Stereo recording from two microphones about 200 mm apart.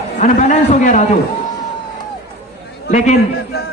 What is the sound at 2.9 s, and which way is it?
Speech, 35° left (ahead or behind).